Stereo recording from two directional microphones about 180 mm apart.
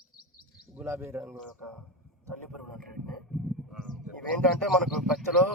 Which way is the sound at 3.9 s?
25° left (ahead or behind).